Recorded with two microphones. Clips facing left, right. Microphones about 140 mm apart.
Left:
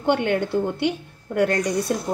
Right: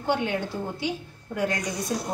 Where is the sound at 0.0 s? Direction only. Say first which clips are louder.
Left 5 dB; 65° left (ahead or behind).